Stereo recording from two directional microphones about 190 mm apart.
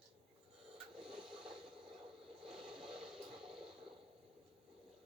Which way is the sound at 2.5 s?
5° right (ahead or behind).